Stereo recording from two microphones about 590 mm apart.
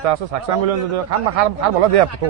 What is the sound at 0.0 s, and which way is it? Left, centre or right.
A man's voice, right.